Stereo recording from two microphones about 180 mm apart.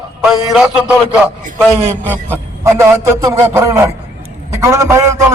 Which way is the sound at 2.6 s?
15° right (ahead or behind).